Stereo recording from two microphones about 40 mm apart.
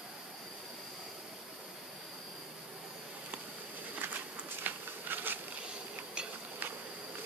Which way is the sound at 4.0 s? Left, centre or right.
Right.